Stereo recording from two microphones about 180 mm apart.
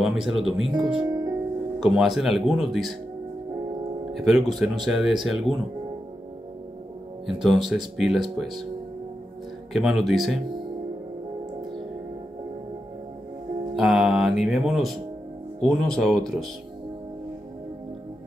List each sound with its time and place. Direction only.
0.0 s speech: centre (ahead or behind)
0.9 s music: 20° right (ahead or behind)
1.8 s speech: centre (ahead or behind)
4.2 s speech: centre (ahead or behind)
7.2 s speech: centre (ahead or behind)
9.7 s speech: centre (ahead or behind)
13.7 s speech: centre (ahead or behind)